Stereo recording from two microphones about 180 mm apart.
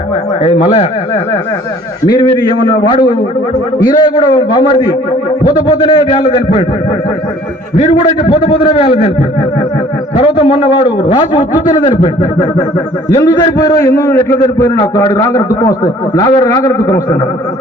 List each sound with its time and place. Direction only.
0.4 s a man's voice: 30° left (ahead or behind)
7.9 s a man's voice: 30° left (ahead or behind)
10.2 s a man's voice: 30° left (ahead or behind)
13.1 s a man's voice: 25° left (ahead or behind)